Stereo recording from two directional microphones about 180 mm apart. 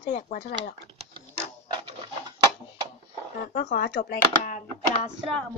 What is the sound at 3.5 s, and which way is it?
Speech, 45° left (ahead or behind).